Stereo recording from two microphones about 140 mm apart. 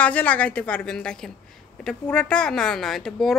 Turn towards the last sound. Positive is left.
turn(degrees=0)  # may be behind; listen again after turning